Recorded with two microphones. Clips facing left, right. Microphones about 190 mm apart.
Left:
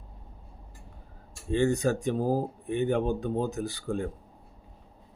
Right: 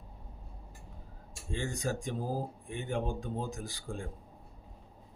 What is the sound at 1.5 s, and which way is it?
Speech, 65° left (ahead or behind).